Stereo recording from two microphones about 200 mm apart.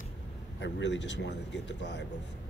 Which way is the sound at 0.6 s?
60° left (ahead or behind).